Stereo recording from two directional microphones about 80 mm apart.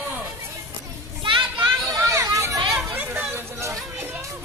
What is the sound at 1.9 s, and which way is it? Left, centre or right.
Children playing, right.